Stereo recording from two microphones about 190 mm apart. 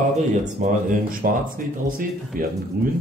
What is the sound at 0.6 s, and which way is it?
Speech, 40° right (ahead or behind).